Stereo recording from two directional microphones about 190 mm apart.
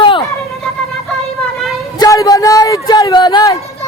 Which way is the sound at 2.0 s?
20° left (ahead or behind).